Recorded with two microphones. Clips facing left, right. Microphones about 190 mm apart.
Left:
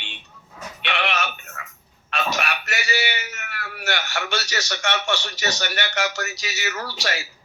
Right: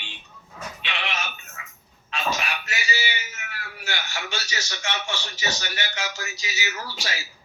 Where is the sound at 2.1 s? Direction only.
65° left (ahead or behind).